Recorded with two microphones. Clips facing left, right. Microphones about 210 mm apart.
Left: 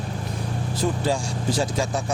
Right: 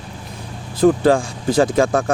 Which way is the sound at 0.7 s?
55° right (ahead or behind).